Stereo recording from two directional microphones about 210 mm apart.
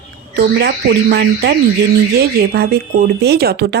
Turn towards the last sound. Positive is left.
turn(degrees=-50)  # may be behind; listen again after turning